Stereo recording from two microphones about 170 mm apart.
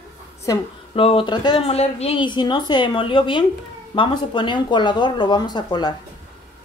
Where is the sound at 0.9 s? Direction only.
30° left (ahead or behind).